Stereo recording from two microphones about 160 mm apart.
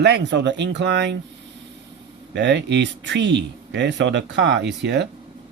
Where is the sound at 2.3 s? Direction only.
90° right.